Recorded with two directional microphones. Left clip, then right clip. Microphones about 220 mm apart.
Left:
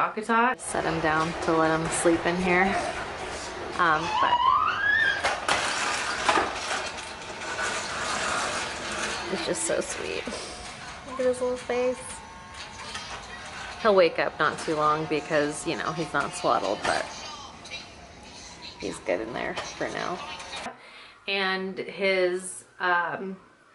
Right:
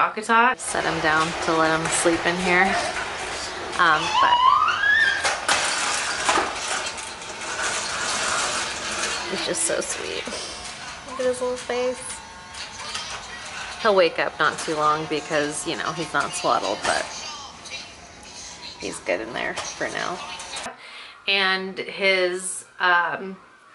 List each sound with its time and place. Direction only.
0.0 s speech: 10° left (ahead or behind)
2.9 s a sound: 10° left (ahead or behind)
3.7 s music: 5° left (ahead or behind)
11.2 s speech: 5° left (ahead or behind)
12.5 s a sound: 5° left (ahead or behind)
14.5 s speech: 20° left (ahead or behind)
14.8 s speech: 5° left (ahead or behind)
20.2 s music: 5° left (ahead or behind)
21.3 s speech: 5° left (ahead or behind)